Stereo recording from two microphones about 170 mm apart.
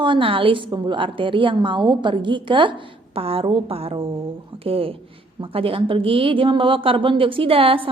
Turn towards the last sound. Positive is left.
turn(degrees=-30)  # may be behind; listen again after turning